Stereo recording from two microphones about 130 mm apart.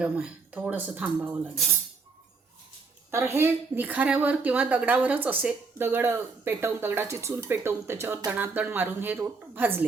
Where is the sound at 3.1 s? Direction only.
20° right (ahead or behind).